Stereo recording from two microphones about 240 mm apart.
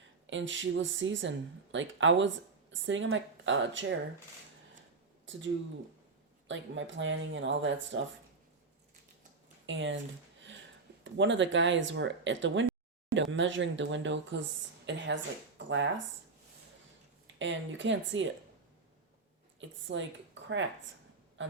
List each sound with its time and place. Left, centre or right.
0.3 s a woman's voice: right
5.3 s speech: right
6.5 s a woman's voice: right
9.6 s a woman's voice: right
11.0 s a woman's voice: right
17.4 s a woman's voice: right
19.5 s speech: right